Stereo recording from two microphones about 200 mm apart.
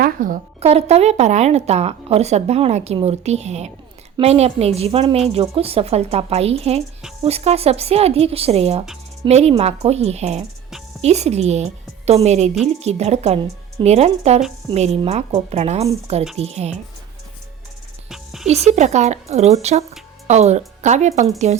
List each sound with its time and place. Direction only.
0.0 s a woman's voice: 45° right (ahead or behind)
18.1 s music: centre (ahead or behind)
18.4 s a woman's voice: 35° right (ahead or behind)